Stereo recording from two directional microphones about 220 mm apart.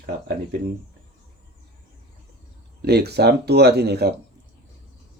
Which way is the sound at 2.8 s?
45° right (ahead or behind).